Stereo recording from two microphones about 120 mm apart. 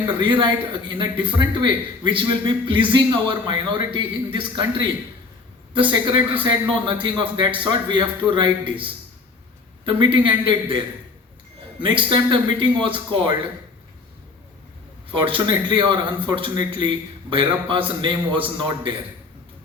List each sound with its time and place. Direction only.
0.2 s a man's voice: 40° right (ahead or behind)
5.7 s a man's voice: 40° right (ahead or behind)
9.8 s a man's voice: 40° right (ahead or behind)
15.1 s a man's voice: 45° right (ahead or behind)